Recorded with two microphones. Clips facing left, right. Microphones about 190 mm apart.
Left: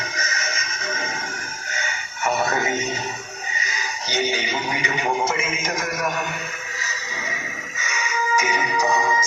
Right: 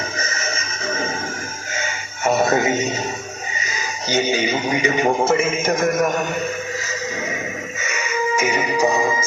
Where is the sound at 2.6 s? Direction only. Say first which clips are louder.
Right 5 dB; 25° right (ahead or behind).